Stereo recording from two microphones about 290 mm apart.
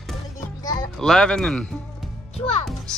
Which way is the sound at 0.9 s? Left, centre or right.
Centre.